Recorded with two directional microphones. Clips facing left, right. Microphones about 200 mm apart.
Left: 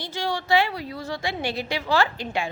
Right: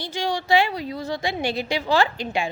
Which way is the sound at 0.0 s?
15° right (ahead or behind).